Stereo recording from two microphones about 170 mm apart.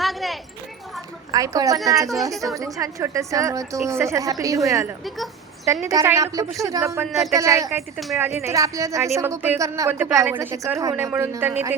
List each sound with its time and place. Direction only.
0.0 s a sound: centre (ahead or behind)
1.3 s a woman's voice: 20° right (ahead or behind)
5.0 s speech: centre (ahead or behind)
5.8 s a woman's voice: 15° right (ahead or behind)
7.9 s speech: centre (ahead or behind)
8.2 s a woman's voice: 15° right (ahead or behind)